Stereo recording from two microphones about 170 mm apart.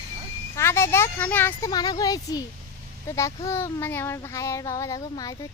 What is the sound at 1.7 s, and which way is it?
Speech, 25° left (ahead or behind).